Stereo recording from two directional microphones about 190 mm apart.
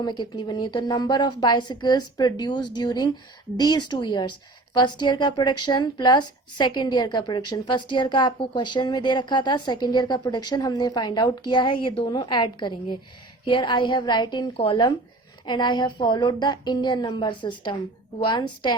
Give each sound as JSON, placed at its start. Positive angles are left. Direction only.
{"t": 0.0, "sound": "a woman's voice", "side_deg": 25}